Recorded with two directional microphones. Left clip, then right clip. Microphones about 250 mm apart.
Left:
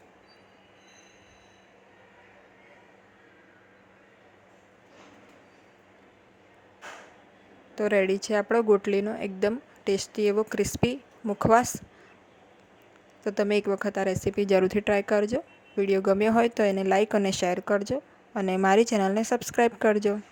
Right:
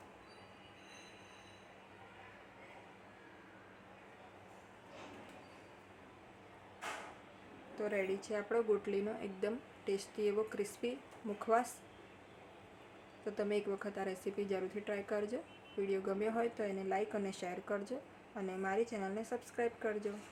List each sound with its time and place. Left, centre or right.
7.8 s a woman's voice: left
13.2 s a woman's voice: left